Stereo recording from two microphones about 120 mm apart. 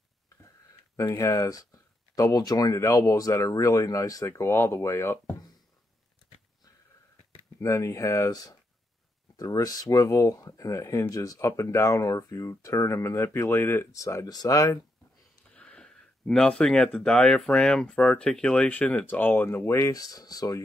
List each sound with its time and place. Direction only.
0.9 s speech: 25° left (ahead or behind)
7.6 s speech: 25° left (ahead or behind)
15.5 s speech: 10° left (ahead or behind); by 20.6 s 30° left (ahead or behind)